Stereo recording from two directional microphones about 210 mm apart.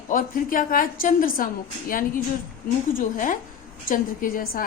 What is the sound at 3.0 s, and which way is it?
A woman's voice, 40° left (ahead or behind).